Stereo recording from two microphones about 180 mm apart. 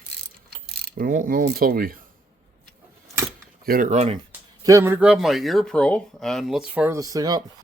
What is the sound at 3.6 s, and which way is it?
Speech, 50° right (ahead or behind).